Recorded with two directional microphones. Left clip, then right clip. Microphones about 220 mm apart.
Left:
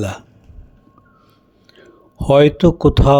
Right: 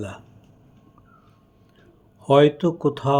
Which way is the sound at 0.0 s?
35° left (ahead or behind).